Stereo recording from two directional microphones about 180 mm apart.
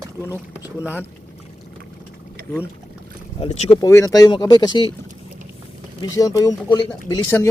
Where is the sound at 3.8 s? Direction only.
20° left (ahead or behind).